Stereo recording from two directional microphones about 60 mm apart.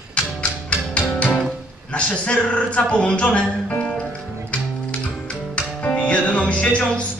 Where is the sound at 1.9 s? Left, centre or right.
Centre.